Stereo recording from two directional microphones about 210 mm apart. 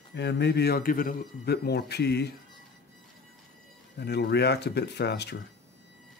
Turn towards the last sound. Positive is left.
turn(degrees=55)  # may be behind; listen again after turning